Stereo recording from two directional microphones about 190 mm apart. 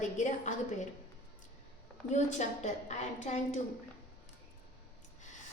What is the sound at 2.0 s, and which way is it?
A woman's voice, 40° left (ahead or behind).